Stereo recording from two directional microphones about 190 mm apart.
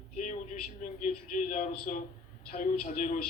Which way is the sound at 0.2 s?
40° left (ahead or behind).